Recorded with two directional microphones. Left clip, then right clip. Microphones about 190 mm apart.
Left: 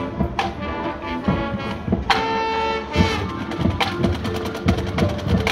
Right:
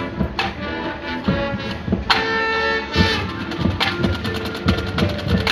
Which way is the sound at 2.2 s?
40° left (ahead or behind).